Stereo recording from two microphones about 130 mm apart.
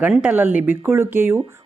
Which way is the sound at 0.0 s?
10° right (ahead or behind).